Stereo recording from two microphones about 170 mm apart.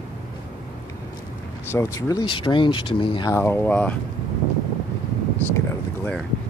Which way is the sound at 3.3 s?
10° left (ahead or behind).